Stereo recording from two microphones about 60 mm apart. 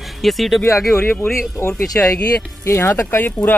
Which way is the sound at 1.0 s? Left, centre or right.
Left.